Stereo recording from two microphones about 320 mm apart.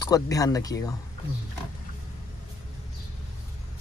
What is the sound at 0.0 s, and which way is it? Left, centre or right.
Speech, centre.